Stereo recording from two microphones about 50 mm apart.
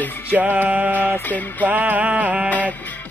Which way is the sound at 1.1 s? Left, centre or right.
Left.